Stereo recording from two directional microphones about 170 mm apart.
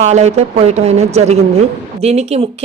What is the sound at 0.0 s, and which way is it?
Speech, 40° right (ahead or behind).